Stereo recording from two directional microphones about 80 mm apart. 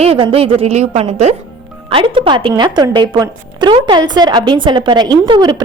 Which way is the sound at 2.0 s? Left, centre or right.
Right.